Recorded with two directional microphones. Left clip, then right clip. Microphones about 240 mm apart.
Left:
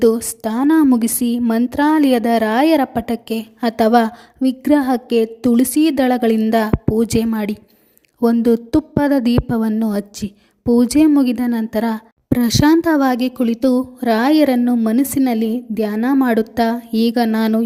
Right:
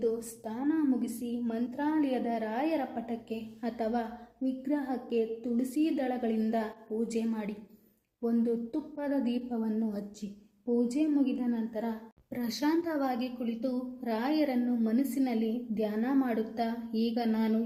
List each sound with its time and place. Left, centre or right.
0.0 s a woman's voice: left